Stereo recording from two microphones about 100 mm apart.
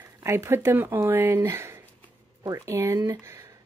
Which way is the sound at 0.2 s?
25° right (ahead or behind).